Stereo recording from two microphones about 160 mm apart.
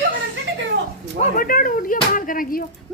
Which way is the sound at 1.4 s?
60° left (ahead or behind).